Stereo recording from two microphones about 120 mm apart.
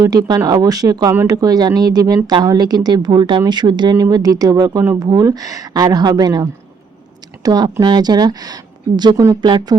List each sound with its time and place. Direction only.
0.0 s speech: 35° right (ahead or behind)